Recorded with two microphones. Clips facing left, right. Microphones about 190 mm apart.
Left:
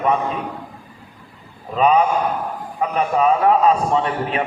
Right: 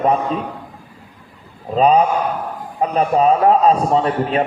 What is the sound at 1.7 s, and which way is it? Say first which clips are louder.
A man's voice: right 2 dB; 35° right (ahead or behind).